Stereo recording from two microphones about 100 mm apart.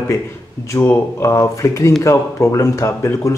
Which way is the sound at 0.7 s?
25° left (ahead or behind).